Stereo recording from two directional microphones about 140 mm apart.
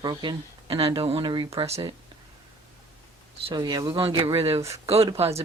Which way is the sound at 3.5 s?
30° right (ahead or behind).